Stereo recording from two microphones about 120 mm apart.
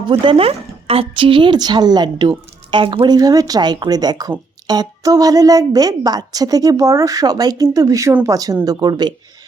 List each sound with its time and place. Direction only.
0.1 s speech: 50° right (ahead or behind)